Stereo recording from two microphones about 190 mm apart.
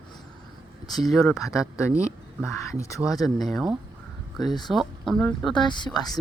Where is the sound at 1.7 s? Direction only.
15° left (ahead or behind).